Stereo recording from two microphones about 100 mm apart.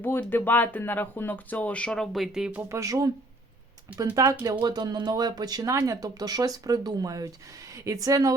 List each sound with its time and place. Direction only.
0.0 s speech: 20° left (ahead or behind); by 2.6 s 5° right (ahead or behind)
2.6 s speech: 25° right (ahead or behind)